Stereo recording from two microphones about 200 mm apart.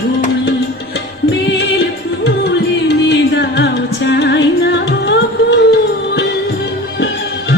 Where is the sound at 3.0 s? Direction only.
55° left (ahead or behind).